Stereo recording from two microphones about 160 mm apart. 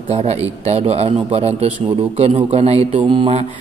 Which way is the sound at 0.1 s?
40° right (ahead or behind).